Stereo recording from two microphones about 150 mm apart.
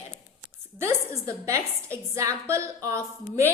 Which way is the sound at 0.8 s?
20° right (ahead or behind).